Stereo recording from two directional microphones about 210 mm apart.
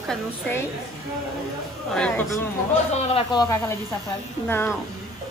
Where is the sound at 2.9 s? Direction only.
30° left (ahead or behind).